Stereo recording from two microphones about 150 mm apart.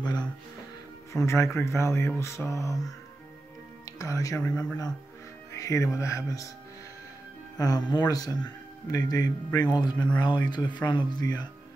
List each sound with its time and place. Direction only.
0.0 s speech: 30° left (ahead or behind)
1.1 s speech: 20° left (ahead or behind)
5.6 s speech: 20° left (ahead or behind)
7.5 s speech: 25° left (ahead or behind)